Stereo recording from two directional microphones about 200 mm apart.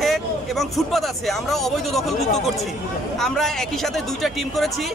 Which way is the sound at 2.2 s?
35° left (ahead or behind).